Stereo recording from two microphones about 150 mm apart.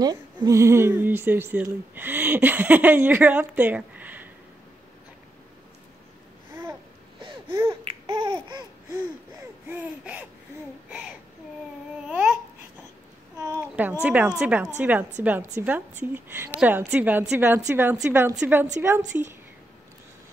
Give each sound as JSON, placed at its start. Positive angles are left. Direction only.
{"t": 0.0, "sound": "speech", "side_deg": -25}
{"t": 7.2, "sound": "babbling", "side_deg": -30}
{"t": 9.7, "sound": "speech", "side_deg": -10}
{"t": 13.4, "sound": "a sound", "side_deg": -15}
{"t": 14.0, "sound": "speech", "side_deg": -10}